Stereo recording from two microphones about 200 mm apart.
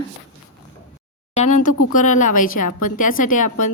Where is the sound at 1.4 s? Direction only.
40° left (ahead or behind).